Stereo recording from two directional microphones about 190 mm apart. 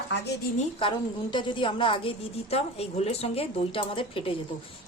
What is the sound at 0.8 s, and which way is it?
A woman's voice, 25° left (ahead or behind).